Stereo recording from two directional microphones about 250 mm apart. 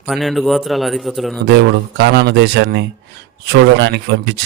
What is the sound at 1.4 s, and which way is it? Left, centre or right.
Speech, right.